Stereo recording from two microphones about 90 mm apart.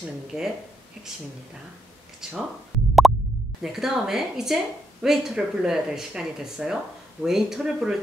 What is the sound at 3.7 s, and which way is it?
Speech, 5° right (ahead or behind).